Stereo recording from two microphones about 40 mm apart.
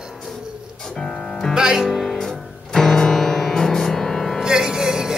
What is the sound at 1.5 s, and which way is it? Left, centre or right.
Music, centre.